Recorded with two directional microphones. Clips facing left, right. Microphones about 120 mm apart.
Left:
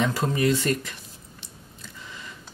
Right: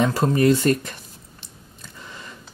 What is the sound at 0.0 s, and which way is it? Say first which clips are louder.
Speech: right 5 dB; 40° right (ahead or behind).